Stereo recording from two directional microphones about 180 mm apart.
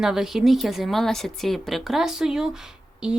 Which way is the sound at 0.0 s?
Centre (ahead or behind).